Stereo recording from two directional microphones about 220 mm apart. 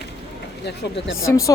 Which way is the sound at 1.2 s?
15° left (ahead or behind).